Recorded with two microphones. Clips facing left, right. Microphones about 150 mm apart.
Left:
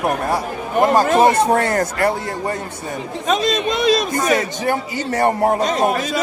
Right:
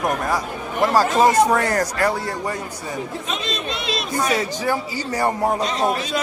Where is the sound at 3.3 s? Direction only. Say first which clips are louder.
Left 14 dB; 45° left (ahead or behind).